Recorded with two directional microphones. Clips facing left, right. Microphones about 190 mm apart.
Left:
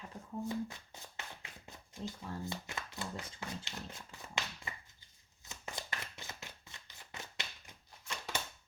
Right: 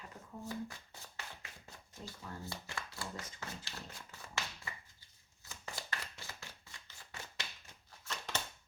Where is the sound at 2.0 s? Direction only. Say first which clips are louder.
Left 5 dB; 20° left (ahead or behind).